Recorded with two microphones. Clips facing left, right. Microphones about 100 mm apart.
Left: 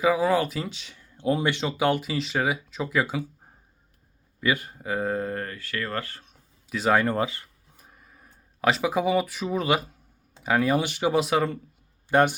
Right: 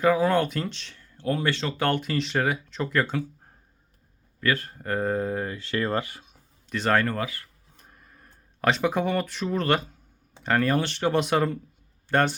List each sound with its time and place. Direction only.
0.0 s speech: 5° left (ahead or behind)
5.5 s speech: 25° right (ahead or behind)
6.7 s speech: 5° left (ahead or behind)
7.1 s speech: 25° left (ahead or behind)
7.8 s a sound: 5° left (ahead or behind)
10.4 s speech: 5° left (ahead or behind)
12.0 s speech: 15° left (ahead or behind)